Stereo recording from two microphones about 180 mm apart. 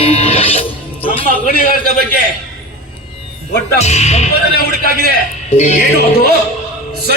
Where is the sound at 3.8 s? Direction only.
35° left (ahead or behind).